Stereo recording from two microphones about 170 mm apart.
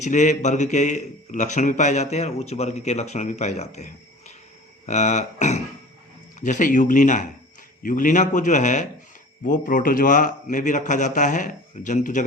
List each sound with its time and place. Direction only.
0.0 s a man's voice: 45° left (ahead or behind)
4.9 s a man's voice: 45° left (ahead or behind)